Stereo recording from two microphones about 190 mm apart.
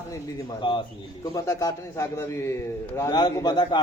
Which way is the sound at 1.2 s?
15° left (ahead or behind).